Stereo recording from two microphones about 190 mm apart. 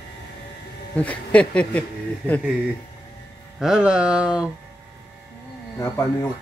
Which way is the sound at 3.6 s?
5° right (ahead or behind).